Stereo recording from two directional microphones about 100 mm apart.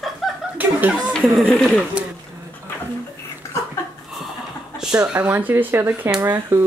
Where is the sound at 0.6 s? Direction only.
15° right (ahead or behind).